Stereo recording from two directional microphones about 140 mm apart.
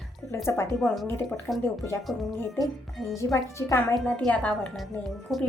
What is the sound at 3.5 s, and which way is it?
Speech, 20° left (ahead or behind).